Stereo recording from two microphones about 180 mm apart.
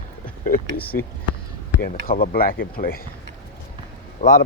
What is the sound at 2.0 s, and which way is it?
Speech, 55° left (ahead or behind).